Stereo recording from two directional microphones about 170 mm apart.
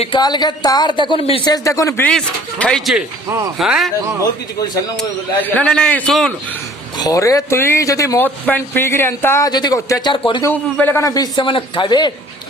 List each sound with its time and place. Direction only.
0.0 s speech: 25° left (ahead or behind); by 3.9 s centre (ahead or behind)
4.2 s speech: 20° left (ahead or behind)
4.9 s speech: 10° left (ahead or behind)
6.9 s speech: 20° left (ahead or behind)
10.4 s speech: 10° left (ahead or behind)